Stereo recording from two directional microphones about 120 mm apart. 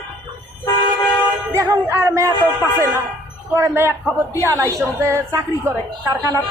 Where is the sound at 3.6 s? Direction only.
20° right (ahead or behind).